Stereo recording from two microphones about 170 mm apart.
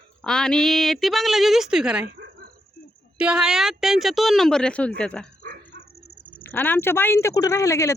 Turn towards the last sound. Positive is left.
turn(degrees=15)  # may be behind; listen again after turning